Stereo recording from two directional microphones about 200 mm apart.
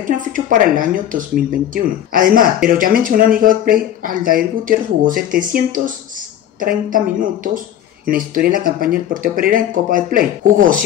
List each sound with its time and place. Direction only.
0.3 s speech: 40° right (ahead or behind)